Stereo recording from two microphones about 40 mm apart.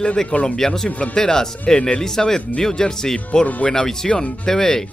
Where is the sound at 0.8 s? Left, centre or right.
Left.